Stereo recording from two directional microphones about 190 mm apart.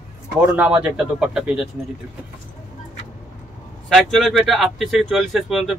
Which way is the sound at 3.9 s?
Centre (ahead or behind).